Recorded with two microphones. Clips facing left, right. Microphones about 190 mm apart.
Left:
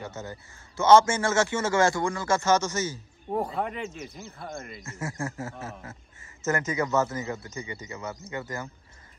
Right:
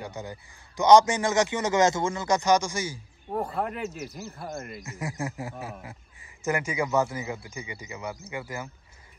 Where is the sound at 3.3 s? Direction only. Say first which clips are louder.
Even; centre (ahead or behind).